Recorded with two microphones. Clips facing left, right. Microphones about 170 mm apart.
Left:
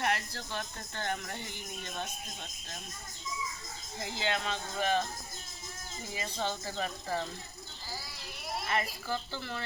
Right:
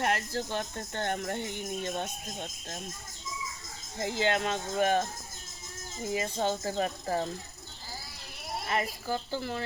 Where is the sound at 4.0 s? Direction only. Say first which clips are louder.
Right 6 dB; 50° right (ahead or behind).